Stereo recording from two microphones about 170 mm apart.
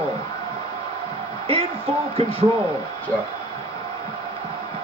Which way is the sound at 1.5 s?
35° right (ahead or behind).